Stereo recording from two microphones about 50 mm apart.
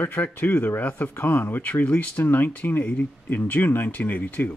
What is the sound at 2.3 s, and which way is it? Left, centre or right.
Speech, left.